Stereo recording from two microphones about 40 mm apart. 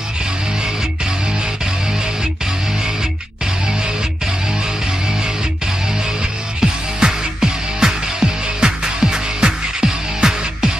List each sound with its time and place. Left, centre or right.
6.6 s music: centre